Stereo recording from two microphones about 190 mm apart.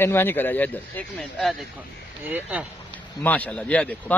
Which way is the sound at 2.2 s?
10° right (ahead or behind).